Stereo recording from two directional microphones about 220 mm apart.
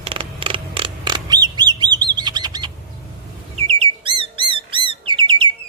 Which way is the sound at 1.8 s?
20° right (ahead or behind).